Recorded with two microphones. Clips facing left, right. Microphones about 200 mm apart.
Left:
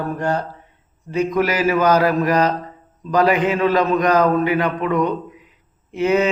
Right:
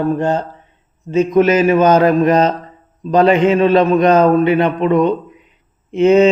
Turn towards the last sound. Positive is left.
turn(degrees=-25)  # may be behind; listen again after turning